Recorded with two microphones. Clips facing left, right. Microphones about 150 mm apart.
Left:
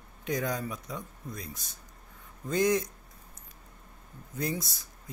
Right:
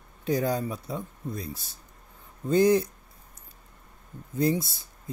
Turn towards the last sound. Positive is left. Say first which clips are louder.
# right 8 dB
turn(degrees=-25)  # may be behind; listen again after turning